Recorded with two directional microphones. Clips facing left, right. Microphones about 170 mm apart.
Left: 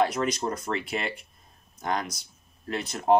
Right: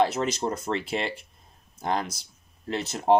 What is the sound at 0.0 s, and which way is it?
Speech, 25° right (ahead or behind).